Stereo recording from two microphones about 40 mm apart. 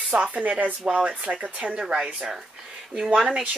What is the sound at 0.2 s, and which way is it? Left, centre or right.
Speech, right.